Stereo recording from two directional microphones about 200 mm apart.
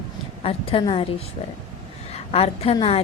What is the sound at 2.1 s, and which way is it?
Speech, 30° left (ahead or behind).